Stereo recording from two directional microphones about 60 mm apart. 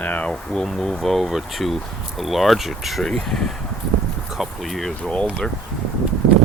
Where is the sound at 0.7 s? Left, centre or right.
Centre.